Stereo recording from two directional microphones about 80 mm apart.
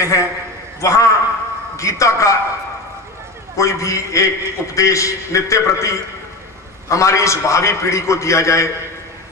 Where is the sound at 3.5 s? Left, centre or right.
Left.